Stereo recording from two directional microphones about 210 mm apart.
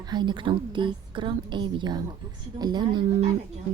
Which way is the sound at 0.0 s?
20° right (ahead or behind).